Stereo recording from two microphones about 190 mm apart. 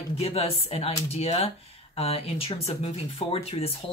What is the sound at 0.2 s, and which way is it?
Speech, 30° left (ahead or behind).